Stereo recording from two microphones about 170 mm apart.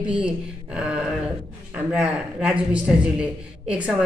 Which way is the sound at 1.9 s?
5° right (ahead or behind).